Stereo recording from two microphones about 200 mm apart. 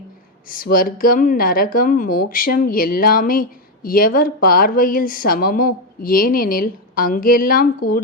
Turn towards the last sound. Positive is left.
turn(degrees=45)  # may be behind; listen again after turning